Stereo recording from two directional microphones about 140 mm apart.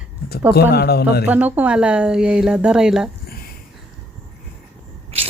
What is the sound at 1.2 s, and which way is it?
Speech, 10° right (ahead or behind).